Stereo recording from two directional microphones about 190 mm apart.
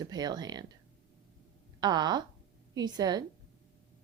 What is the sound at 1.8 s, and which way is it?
Speech, 20° right (ahead or behind).